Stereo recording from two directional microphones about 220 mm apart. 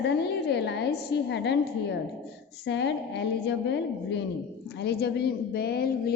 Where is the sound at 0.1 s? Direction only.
50° left (ahead or behind).